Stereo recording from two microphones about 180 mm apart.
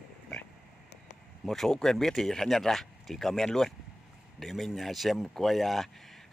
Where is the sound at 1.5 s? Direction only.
Centre (ahead or behind).